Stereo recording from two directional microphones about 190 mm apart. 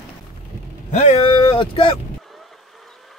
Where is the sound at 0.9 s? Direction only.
30° left (ahead or behind).